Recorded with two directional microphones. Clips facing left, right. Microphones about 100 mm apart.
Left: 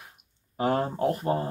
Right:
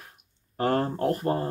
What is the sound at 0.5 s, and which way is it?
Speech, 5° left (ahead or behind).